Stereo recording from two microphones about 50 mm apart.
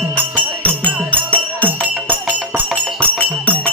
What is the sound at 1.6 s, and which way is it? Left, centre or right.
Music, right.